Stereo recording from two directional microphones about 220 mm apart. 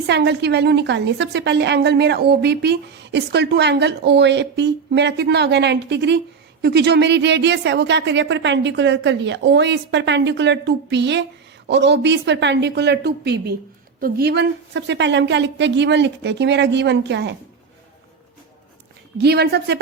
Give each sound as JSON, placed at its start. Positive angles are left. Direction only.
{"t": 0.1, "sound": "a woman's voice", "side_deg": -50}
{"t": 19.1, "sound": "a woman's voice", "side_deg": -50}